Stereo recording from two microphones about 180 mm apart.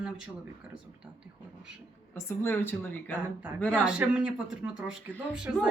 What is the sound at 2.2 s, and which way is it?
Speech, 15° left (ahead or behind).